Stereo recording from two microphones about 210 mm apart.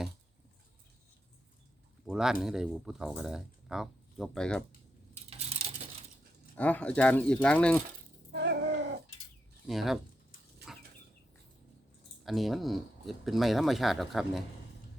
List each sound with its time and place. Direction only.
2.0 s speech: 5° right (ahead or behind)
5.1 s a sound: 30° right (ahead or behind)
6.6 s speech: 5° left (ahead or behind)
8.3 s a sound: 55° right (ahead or behind)
9.6 s speech: centre (ahead or behind)
12.2 s speech: centre (ahead or behind)